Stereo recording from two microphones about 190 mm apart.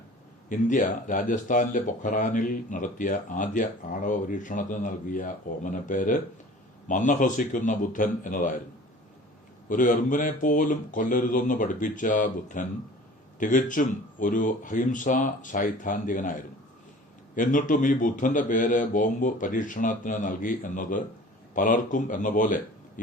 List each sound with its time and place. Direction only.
0.4 s speech: 45° left (ahead or behind)
9.6 s speech: 45° left (ahead or behind)